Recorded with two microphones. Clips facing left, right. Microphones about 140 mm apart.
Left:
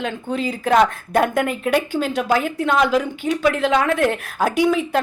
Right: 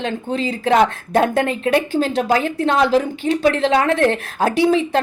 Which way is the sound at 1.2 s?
30° right (ahead or behind).